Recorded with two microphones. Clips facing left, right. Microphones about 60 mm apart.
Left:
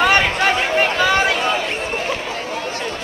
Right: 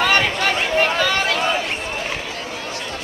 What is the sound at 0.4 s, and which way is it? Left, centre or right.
Chatter, left.